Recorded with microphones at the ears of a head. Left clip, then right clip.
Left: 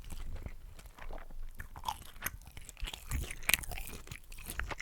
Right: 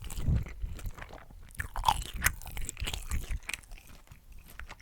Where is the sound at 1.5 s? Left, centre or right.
Right.